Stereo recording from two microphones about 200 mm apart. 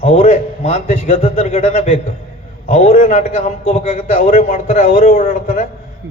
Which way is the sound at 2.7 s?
30° left (ahead or behind).